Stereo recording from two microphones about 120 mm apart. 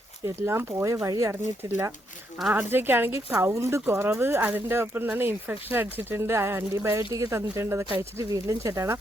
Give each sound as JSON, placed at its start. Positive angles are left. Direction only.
{"t": 0.3, "sound": "speech", "side_deg": -20}